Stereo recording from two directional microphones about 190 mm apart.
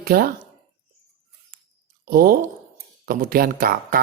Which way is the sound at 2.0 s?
50° right (ahead or behind).